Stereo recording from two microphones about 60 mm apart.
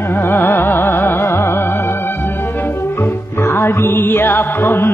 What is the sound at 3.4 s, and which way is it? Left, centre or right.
Music, left.